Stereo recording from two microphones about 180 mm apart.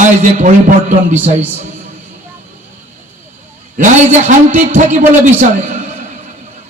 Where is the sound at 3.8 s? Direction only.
45° right (ahead or behind).